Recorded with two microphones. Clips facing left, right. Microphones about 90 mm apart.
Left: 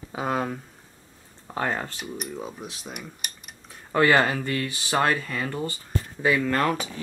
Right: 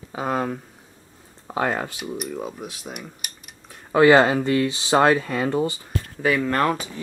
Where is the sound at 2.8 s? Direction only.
5° right (ahead or behind).